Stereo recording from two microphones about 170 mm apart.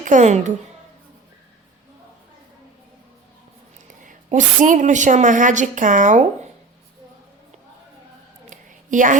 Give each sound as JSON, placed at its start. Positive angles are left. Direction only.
{"t": 0.0, "sound": "a woman's voice", "side_deg": -45}
{"t": 4.0, "sound": "a woman's voice", "side_deg": -50}
{"t": 8.4, "sound": "a sound", "side_deg": -50}